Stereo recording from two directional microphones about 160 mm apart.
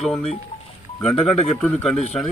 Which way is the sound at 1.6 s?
5° left (ahead or behind).